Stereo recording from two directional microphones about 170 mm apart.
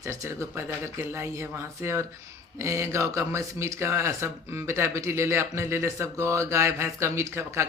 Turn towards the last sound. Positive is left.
turn(degrees=-15)  # may be behind; listen again after turning